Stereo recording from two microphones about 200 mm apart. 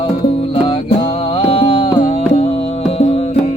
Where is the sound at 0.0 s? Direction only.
30° left (ahead or behind).